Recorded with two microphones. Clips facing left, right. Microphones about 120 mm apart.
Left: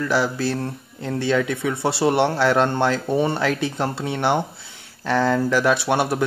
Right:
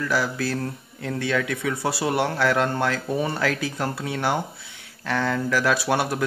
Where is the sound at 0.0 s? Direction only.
25° left (ahead or behind).